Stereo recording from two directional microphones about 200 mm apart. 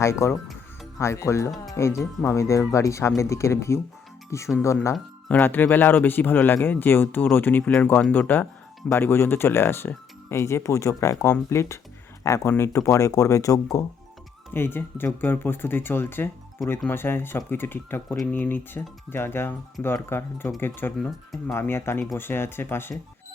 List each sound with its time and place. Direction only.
0.0 s speech: 15° left (ahead or behind)